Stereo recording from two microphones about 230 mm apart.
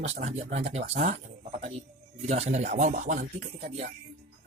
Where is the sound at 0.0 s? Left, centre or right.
Right.